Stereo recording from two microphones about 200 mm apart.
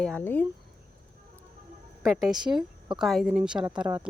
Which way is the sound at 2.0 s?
Centre (ahead or behind).